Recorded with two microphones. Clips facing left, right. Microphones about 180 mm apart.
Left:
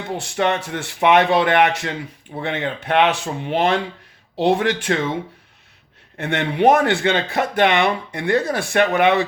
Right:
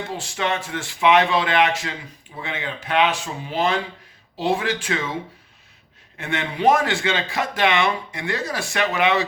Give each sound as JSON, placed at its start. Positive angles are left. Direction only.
{"t": 0.1, "sound": "speech", "side_deg": 60}
{"t": 6.1, "sound": "speech", "side_deg": 60}